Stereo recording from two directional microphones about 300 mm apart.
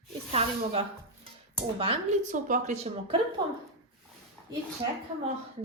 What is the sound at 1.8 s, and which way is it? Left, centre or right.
A woman's voice, right.